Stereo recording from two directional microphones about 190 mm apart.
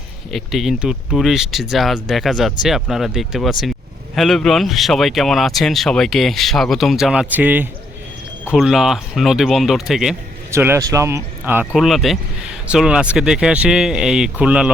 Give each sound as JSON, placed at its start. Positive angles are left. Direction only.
{"t": 0.3, "sound": "speech", "side_deg": 0}
{"t": 10.5, "sound": "speech", "side_deg": -15}